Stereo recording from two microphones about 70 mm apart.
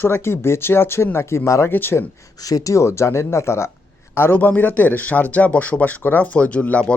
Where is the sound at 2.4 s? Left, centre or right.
Left.